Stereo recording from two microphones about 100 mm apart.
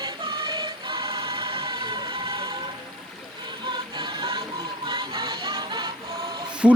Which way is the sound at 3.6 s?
50° right (ahead or behind).